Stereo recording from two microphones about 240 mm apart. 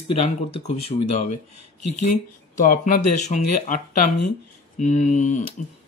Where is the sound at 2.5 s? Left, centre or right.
Left.